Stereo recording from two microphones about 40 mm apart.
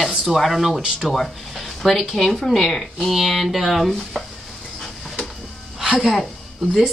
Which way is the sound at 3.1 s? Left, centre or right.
Centre.